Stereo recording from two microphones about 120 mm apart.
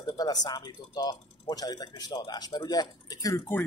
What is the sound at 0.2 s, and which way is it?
Speech, 35° left (ahead or behind).